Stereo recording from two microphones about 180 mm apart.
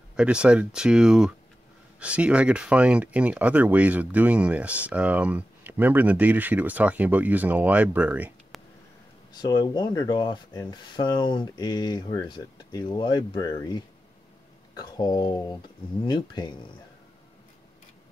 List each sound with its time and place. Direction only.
0.1 s speech: 5° right (ahead or behind)
9.3 s speech: 25° left (ahead or behind)